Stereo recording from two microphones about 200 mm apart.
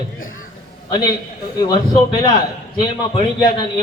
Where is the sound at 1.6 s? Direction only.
20° left (ahead or behind).